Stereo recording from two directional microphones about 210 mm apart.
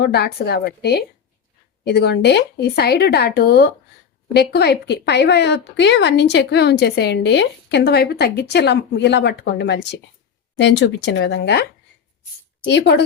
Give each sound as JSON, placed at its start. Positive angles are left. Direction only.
{"t": 0.0, "sound": "a woman's voice", "side_deg": 50}
{"t": 12.6, "sound": "a woman's voice", "side_deg": 55}